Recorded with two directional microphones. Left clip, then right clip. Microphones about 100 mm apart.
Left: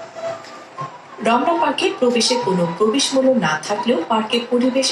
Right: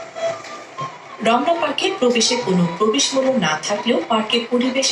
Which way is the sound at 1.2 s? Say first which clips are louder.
Left 1 dB; 40° left (ahead or behind).